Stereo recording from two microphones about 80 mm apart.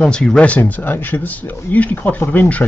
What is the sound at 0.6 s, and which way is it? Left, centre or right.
Speech, left.